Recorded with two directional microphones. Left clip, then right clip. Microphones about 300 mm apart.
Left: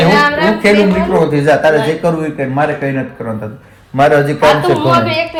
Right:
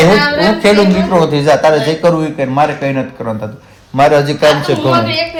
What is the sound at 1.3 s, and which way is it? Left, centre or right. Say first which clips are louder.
A man's voice: even; centre.